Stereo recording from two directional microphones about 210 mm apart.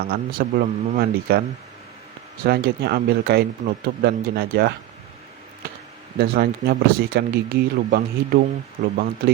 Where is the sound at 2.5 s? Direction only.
50° right (ahead or behind).